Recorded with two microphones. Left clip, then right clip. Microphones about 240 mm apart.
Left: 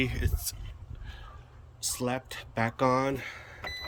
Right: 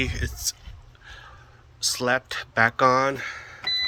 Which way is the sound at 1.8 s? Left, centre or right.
Centre.